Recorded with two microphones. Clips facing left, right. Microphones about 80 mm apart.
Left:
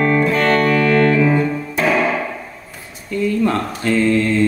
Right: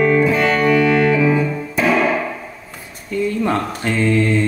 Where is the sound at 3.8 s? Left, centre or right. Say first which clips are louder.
Left 5 dB; right.